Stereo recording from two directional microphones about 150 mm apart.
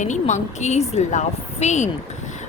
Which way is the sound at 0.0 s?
55° left (ahead or behind).